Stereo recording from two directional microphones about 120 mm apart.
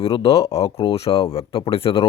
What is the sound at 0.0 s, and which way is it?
A man's voice, 50° left (ahead or behind).